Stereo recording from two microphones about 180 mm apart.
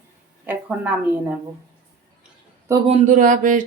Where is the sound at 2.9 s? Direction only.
45° right (ahead or behind).